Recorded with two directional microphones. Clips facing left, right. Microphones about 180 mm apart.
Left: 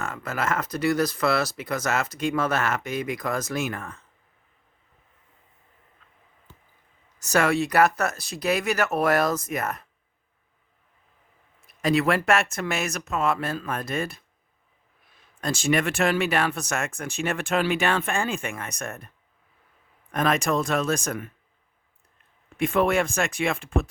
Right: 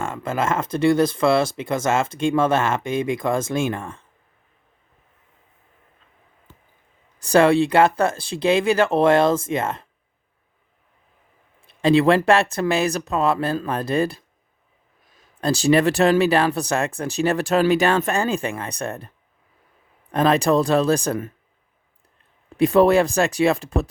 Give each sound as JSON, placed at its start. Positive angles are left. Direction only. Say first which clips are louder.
{"t": 0.0, "sound": "speech", "louder": "right 5 dB", "side_deg": -25}
{"t": 7.2, "sound": "speech", "louder": "right 7 dB", "side_deg": -30}
{"t": 11.6, "sound": "speech", "louder": "right 6 dB", "side_deg": -30}
{"t": 22.4, "sound": "speech", "louder": "right 7 dB", "side_deg": -35}